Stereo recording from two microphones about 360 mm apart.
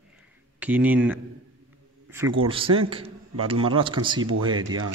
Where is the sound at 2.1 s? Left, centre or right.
Centre.